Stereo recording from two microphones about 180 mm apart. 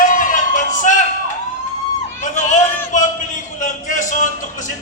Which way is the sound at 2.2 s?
45° left (ahead or behind).